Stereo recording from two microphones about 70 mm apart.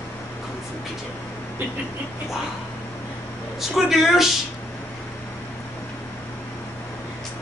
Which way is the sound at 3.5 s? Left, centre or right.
Centre.